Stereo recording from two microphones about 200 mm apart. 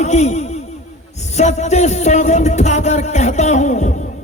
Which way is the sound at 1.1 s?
35° left (ahead or behind).